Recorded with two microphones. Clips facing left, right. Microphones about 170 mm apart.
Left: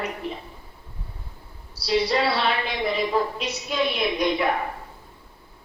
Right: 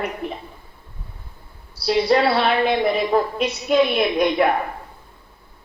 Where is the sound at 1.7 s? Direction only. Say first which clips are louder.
Right 5 dB; 55° right (ahead or behind).